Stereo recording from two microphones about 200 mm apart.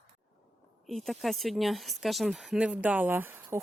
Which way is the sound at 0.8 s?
Centre (ahead or behind).